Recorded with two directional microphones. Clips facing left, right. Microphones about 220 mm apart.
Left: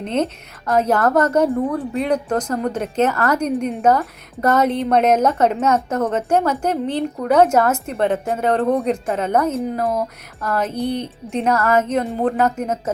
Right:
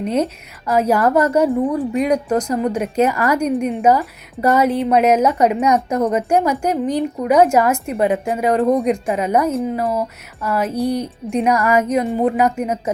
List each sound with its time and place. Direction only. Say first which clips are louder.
0.0 s a woman's voice: right 2 dB; 10° right (ahead or behind)
10.7 s a woman's voice: right 3 dB; 35° right (ahead or behind)
11.3 s a woman's voice: right 2 dB; 10° right (ahead or behind)